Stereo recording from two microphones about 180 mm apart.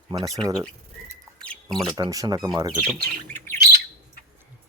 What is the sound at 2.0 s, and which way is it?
Speech, 20° right (ahead or behind).